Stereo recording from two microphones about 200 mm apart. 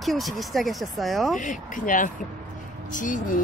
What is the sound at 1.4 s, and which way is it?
Speech, 40° left (ahead or behind).